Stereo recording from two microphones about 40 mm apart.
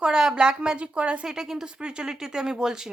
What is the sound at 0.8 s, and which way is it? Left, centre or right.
Speech, right.